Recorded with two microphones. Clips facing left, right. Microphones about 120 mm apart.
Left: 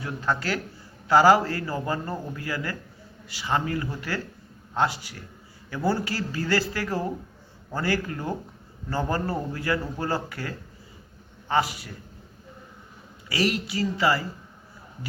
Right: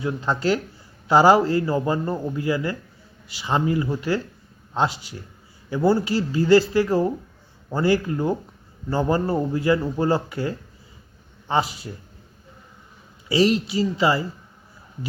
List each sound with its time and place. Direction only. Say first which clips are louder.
0.0 s a man's voice: right 5 dB; 20° right (ahead or behind)
13.2 s a man's voice: right 7 dB; 25° right (ahead or behind)